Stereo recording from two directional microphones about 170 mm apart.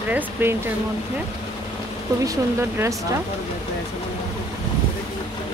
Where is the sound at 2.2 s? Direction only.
15° right (ahead or behind).